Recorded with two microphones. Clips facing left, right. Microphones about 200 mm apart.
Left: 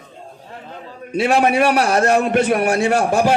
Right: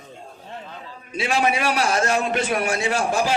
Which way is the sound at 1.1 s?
60° left (ahead or behind).